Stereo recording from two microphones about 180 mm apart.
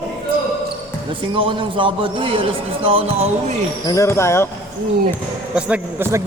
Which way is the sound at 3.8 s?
20° left (ahead or behind).